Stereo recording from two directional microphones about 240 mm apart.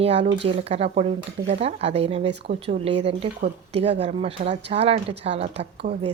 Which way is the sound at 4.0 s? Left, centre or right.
Right.